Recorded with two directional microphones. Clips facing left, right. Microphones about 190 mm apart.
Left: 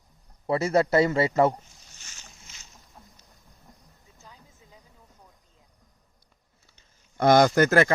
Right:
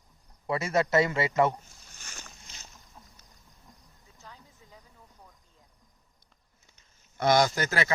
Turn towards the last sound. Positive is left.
turn(degrees=50)  # may be behind; listen again after turning